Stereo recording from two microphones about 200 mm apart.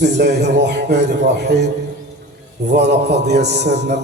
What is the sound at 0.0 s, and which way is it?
A man's voice, 60° right (ahead or behind).